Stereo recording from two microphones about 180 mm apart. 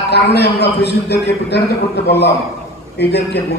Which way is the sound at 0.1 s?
65° left (ahead or behind).